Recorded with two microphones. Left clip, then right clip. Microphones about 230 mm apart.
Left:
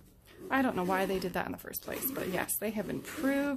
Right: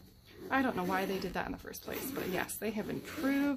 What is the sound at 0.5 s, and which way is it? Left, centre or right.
Speech, left.